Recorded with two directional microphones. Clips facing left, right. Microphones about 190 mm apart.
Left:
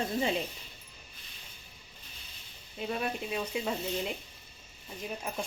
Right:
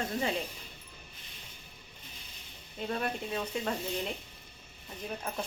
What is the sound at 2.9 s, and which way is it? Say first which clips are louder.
Speech: even; 10° left (ahead or behind).